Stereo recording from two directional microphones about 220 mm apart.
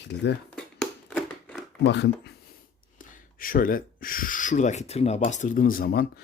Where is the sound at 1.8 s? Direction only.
50° left (ahead or behind).